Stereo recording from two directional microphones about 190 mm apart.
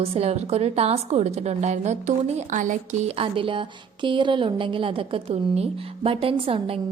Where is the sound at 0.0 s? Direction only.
30° right (ahead or behind).